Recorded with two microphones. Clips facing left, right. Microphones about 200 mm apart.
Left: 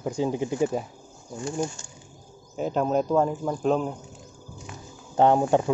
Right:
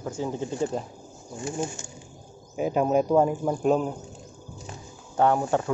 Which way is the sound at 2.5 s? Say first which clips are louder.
Right 2 dB; 10° right (ahead or behind).